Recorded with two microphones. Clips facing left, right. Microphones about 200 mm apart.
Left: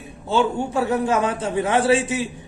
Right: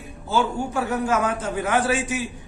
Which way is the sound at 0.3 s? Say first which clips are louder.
Left 3 dB; 30° left (ahead or behind).